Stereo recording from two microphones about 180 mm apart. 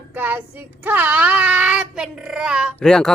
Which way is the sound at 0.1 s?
10° right (ahead or behind).